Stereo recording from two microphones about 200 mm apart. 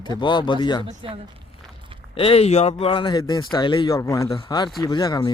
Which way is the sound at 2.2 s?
30° left (ahead or behind).